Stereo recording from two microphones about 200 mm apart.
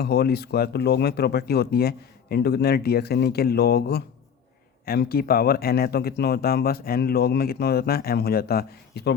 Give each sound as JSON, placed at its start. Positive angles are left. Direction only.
{"t": 0.0, "sound": "speech", "side_deg": 55}